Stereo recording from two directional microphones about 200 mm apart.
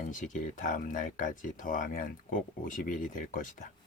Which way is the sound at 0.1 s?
40° left (ahead or behind).